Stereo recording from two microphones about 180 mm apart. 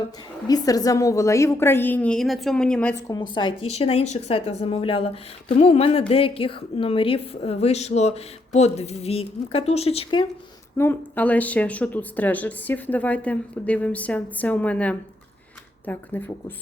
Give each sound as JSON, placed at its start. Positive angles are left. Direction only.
{"t": 0.4, "sound": "speech", "side_deg": 20}
{"t": 2.9, "sound": "speech", "side_deg": 20}
{"t": 10.8, "sound": "speech", "side_deg": 10}